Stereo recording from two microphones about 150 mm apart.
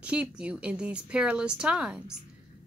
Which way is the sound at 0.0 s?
5° right (ahead or behind).